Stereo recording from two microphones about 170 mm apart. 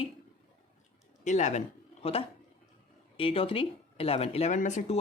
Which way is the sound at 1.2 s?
45° left (ahead or behind).